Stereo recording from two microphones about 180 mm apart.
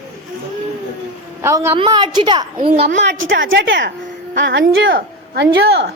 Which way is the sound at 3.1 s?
90° right.